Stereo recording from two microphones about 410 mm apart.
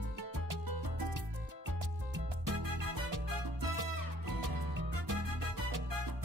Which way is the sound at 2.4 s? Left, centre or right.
Right.